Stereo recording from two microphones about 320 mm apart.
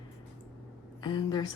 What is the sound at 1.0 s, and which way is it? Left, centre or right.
Speech, centre.